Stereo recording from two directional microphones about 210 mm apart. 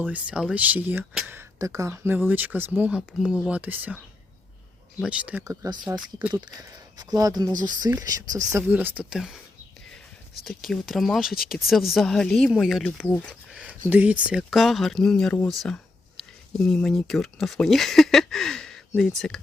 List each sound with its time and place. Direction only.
0.0 s speech: 5° right (ahead or behind)
6.1 s speech: 10° right (ahead or behind)
6.4 s speech: 20° right (ahead or behind); by 9.4 s centre (ahead or behind)
10.4 s speech: centre (ahead or behind)